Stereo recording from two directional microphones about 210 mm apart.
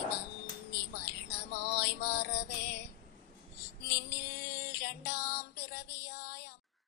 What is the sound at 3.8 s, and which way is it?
Female singing, 50° left (ahead or behind).